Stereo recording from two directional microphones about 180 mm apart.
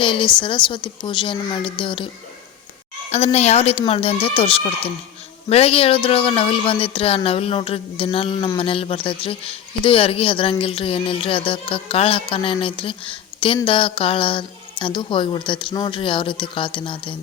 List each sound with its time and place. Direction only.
0.0 s speech: 30° left (ahead or behind)
3.3 s speech: 35° left (ahead or behind)